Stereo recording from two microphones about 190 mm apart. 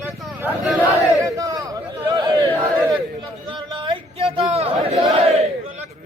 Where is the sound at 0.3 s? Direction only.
10° right (ahead or behind).